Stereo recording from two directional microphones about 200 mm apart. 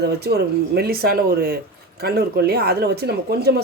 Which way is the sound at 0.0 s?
55° right (ahead or behind).